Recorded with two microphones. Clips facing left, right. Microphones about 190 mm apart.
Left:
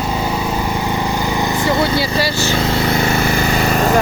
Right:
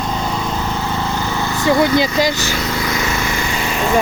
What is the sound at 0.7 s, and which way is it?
Vehicle, 15° left (ahead or behind).